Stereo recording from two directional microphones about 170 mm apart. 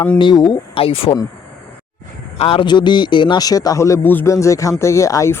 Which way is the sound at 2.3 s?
35° left (ahead or behind).